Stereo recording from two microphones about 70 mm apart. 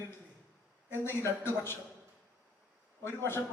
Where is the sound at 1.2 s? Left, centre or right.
Left.